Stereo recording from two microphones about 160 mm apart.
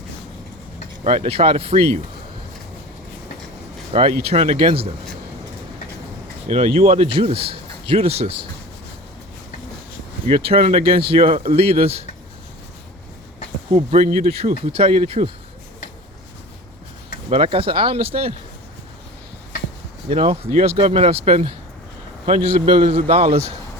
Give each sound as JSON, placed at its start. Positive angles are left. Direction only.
{"t": 1.0, "sound": "a man's voice", "side_deg": -35}
{"t": 4.2, "sound": "a man's voice", "side_deg": -40}
{"t": 6.5, "sound": "a man's voice", "side_deg": -40}
{"t": 10.2, "sound": "a man's voice", "side_deg": -35}
{"t": 13.7, "sound": "a man's voice", "side_deg": -35}
{"t": 17.2, "sound": "a man's voice", "side_deg": -35}
{"t": 20.1, "sound": "a man's voice", "side_deg": -40}